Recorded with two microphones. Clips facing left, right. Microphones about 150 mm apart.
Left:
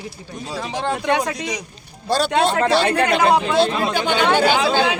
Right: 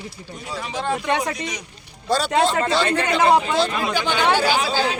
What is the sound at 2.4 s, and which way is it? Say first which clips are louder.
Speech: left 3 dB; 70° left (ahead or behind).